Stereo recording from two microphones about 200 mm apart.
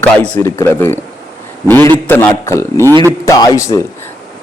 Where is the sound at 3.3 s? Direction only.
15° left (ahead or behind).